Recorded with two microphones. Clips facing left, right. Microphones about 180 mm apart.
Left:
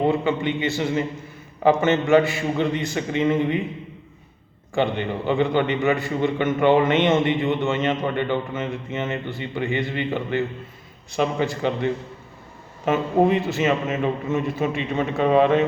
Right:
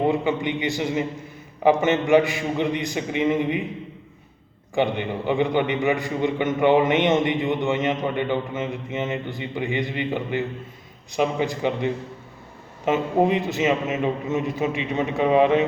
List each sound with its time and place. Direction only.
0.0 s a man's voice: 15° right (ahead or behind)
4.7 s a man's voice: 15° right (ahead or behind)